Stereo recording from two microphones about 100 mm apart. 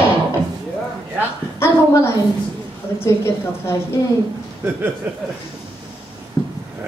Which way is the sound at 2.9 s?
25° left (ahead or behind).